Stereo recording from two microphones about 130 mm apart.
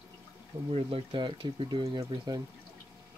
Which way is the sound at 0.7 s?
45° right (ahead or behind).